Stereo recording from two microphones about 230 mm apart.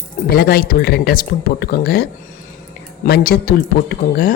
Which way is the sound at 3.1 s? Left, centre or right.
Left.